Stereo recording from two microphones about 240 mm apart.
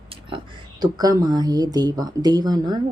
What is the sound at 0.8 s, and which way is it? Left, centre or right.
Speech, centre.